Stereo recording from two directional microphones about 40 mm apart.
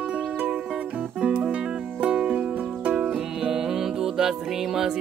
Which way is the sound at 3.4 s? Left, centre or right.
Centre.